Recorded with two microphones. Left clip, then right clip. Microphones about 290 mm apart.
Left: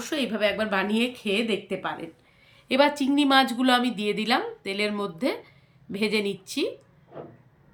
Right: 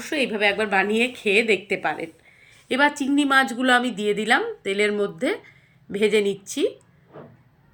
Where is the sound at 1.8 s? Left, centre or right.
Centre.